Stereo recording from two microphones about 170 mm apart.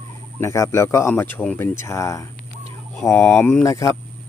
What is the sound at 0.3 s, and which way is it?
Speech, 15° left (ahead or behind).